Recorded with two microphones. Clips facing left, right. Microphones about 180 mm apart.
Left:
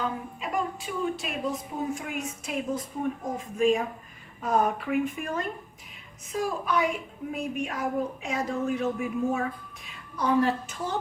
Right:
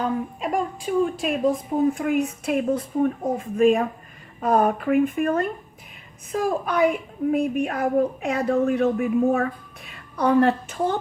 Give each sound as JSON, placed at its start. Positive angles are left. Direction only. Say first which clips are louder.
{"t": 0.3, "sound": "a woman's voice", "louder": "right 5 dB", "side_deg": -50}